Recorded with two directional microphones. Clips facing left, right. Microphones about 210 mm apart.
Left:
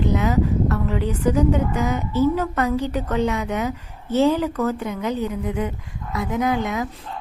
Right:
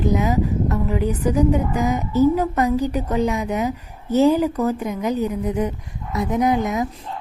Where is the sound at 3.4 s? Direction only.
35° right (ahead or behind).